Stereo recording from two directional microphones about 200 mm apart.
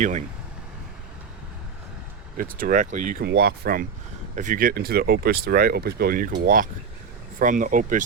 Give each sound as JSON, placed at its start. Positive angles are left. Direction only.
{"t": 0.0, "sound": "speech", "side_deg": -35}
{"t": 2.4, "sound": "speech", "side_deg": -45}
{"t": 3.2, "sound": "speech", "side_deg": -50}